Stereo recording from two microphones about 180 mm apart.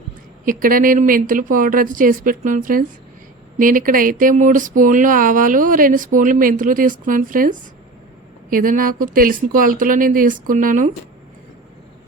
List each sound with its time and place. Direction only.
0.4 s speech: 50° right (ahead or behind)